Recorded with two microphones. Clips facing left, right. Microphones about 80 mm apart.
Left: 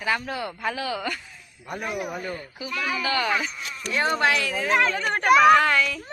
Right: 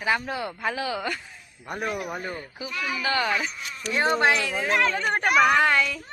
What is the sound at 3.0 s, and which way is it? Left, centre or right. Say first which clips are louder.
Speech: right 1 dB; right.